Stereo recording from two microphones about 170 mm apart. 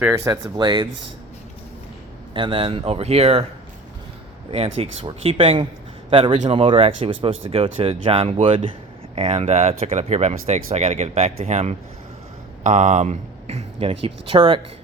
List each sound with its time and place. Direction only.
0.3 s speech: 25° right (ahead or behind)
2.3 s speech: 30° right (ahead or behind)
4.5 s speech: 35° right (ahead or behind)